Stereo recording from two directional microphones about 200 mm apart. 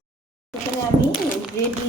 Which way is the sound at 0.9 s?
30° right (ahead or behind).